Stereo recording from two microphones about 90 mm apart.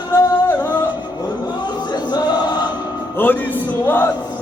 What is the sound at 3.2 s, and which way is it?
Music, 20° left (ahead or behind).